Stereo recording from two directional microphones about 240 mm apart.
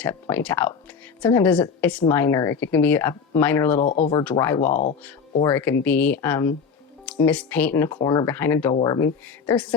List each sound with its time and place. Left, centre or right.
0.0 s a woman's voice: centre
3.8 s speech: left
4.2 s a woman's voice: centre
4.6 s speech: left
5.4 s a woman's voice: centre